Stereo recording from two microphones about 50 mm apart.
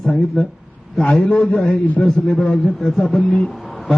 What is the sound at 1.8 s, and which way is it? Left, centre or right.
Speech, left.